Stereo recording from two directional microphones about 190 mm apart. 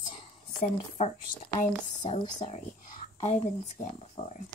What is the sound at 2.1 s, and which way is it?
A woman's voice, 30° left (ahead or behind).